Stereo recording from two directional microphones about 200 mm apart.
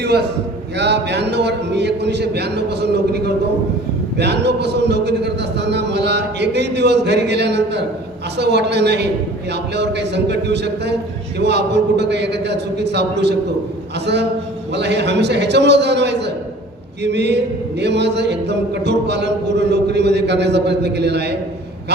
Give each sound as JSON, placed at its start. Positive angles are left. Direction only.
{"t": 0.0, "sound": "a man's voice", "side_deg": -55}